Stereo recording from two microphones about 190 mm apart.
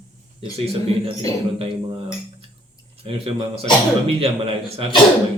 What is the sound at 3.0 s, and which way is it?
Speech, 30° right (ahead or behind).